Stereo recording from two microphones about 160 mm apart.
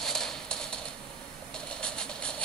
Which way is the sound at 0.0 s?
5° left (ahead or behind).